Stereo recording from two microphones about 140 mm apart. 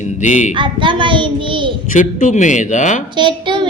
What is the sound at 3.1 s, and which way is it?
Speech, 35° right (ahead or behind).